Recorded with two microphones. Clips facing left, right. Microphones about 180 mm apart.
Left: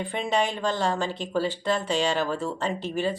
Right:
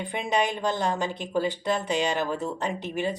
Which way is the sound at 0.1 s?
15° right (ahead or behind).